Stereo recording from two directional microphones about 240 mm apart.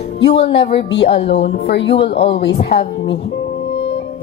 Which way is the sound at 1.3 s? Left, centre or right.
Left.